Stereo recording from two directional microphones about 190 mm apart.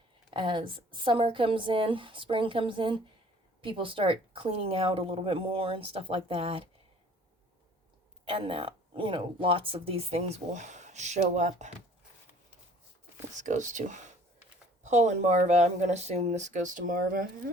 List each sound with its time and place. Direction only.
0.3 s a woman's voice: 25° right (ahead or behind)
8.2 s speech: 30° right (ahead or behind)
13.4 s speech: 40° right (ahead or behind)